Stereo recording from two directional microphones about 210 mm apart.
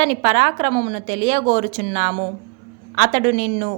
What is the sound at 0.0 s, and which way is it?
A woman's voice, 30° right (ahead or behind).